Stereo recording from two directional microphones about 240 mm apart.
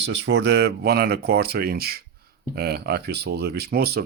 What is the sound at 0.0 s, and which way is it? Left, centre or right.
Speech, right.